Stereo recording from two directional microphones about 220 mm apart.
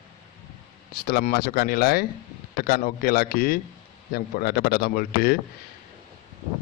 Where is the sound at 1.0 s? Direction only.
45° left (ahead or behind).